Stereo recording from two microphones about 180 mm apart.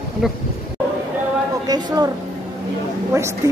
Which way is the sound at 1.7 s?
20° right (ahead or behind).